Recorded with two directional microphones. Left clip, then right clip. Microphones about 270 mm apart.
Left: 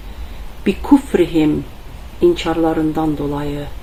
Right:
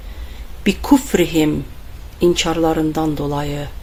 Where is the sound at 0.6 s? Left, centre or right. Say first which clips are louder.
Left 1 dB; right.